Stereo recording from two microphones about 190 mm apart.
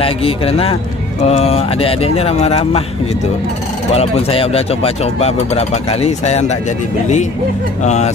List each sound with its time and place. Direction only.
0.0 s speech: 30° left (ahead or behind)
3.9 s speech: 30° left (ahead or behind)
7.8 s speech: 35° left (ahead or behind)